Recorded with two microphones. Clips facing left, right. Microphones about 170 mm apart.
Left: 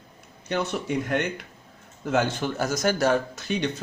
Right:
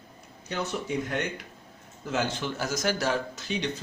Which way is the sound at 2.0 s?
55° left (ahead or behind).